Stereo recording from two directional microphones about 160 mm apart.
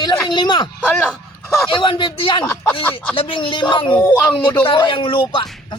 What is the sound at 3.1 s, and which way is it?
Speech, 35° left (ahead or behind).